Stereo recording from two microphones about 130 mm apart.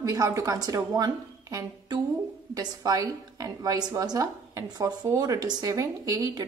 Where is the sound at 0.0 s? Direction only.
25° right (ahead or behind).